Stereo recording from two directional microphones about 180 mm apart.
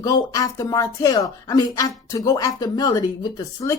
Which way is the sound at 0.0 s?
20° left (ahead or behind).